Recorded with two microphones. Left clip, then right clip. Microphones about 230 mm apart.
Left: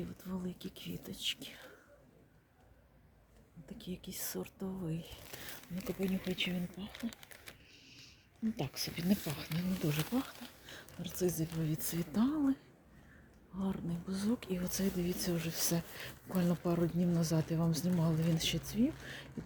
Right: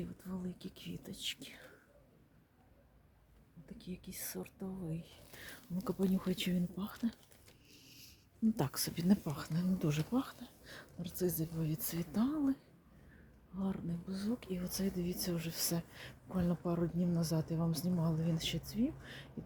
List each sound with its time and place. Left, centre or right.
0.2 s speech: centre
3.7 s speech: centre
5.8 s speech: right
8.5 s speech: right; by 12.5 s centre
13.6 s speech: centre